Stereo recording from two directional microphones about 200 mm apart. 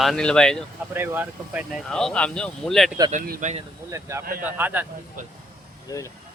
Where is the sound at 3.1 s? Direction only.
45° right (ahead or behind).